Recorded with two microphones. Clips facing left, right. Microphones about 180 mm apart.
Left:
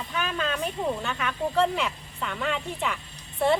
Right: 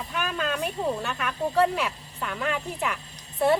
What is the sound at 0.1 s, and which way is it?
Speech, 5° right (ahead or behind).